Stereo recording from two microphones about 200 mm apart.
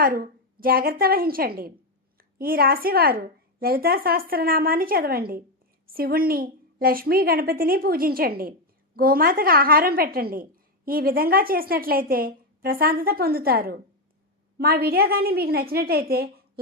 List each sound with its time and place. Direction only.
0.0 s a woman's voice: 45° right (ahead or behind)